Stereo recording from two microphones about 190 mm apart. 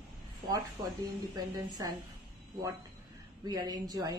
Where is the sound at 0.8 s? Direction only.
20° right (ahead or behind).